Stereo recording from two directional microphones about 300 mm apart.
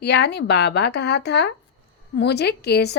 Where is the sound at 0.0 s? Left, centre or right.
Left.